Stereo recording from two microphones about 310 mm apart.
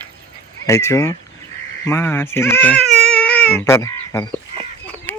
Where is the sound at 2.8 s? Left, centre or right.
Right.